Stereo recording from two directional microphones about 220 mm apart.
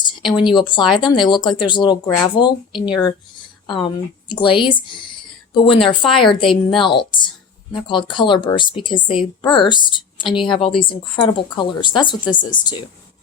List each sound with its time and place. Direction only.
0.5 s a woman's voice: 20° left (ahead or behind)